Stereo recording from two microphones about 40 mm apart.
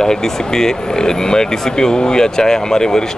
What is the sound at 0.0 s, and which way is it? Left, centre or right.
A man's voice, centre.